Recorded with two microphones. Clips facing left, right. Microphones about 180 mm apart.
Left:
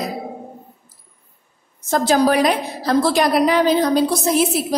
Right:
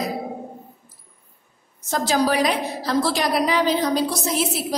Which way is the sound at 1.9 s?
50° left (ahead or behind).